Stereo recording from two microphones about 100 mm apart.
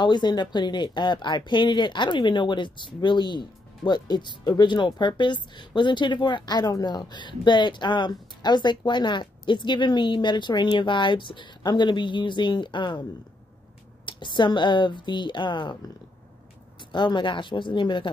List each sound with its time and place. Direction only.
0.0 s speech: 45° left (ahead or behind)
14.0 s speech: 55° left (ahead or behind)
16.9 s speech: 50° left (ahead or behind)